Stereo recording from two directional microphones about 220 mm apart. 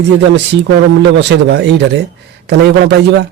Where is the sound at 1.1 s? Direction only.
50° right (ahead or behind).